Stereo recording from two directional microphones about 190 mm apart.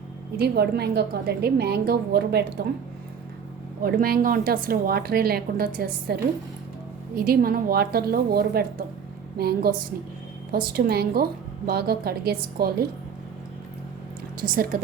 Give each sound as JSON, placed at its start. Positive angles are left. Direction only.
{"t": 0.3, "sound": "a woman's voice", "side_deg": -55}
{"t": 3.8, "sound": "a woman's voice", "side_deg": -50}
{"t": 14.4, "sound": "a woman's voice", "side_deg": -50}